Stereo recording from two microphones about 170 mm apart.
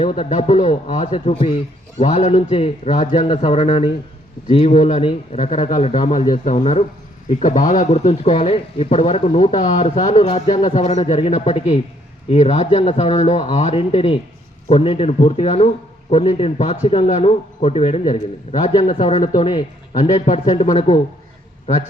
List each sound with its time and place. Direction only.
0.0 s a man's voice: 35° left (ahead or behind)